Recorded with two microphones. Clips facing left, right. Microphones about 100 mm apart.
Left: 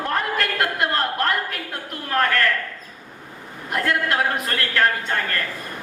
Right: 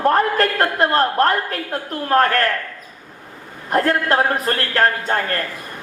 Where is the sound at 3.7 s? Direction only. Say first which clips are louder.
Right 5 dB; 40° right (ahead or behind).